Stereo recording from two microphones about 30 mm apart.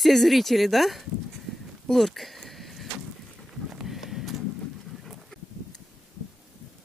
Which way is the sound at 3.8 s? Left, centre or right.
Centre.